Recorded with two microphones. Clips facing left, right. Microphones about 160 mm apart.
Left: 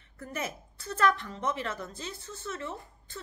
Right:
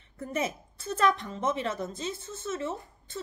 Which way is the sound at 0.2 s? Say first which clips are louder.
Right 5 dB; 25° right (ahead or behind).